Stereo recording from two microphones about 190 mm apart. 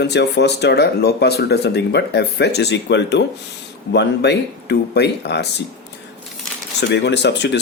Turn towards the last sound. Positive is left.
turn(degrees=65)  # may be behind; listen again after turning